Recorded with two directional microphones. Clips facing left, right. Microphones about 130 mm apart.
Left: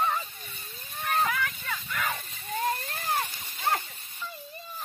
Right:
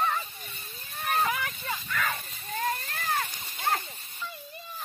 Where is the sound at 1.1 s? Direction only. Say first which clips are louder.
Left 1 dB; 15° right (ahead or behind).